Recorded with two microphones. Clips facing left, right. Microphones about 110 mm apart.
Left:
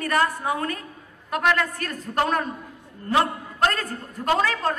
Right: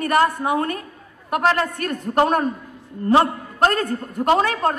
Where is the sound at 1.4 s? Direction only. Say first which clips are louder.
Right 3 dB; 35° right (ahead or behind).